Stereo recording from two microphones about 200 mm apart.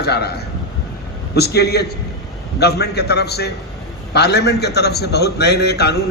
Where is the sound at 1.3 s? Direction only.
55° left (ahead or behind).